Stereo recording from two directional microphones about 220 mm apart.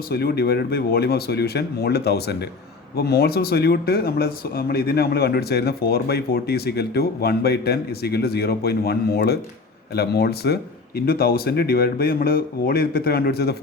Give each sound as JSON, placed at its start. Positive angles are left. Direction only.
{"t": 0.1, "sound": "speech", "side_deg": 45}